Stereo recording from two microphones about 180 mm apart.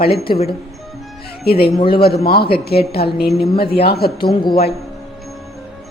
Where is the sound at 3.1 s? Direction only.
Centre (ahead or behind).